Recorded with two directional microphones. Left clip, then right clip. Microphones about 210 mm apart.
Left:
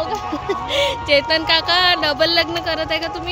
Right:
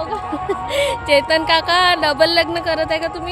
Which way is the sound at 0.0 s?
5° left (ahead or behind).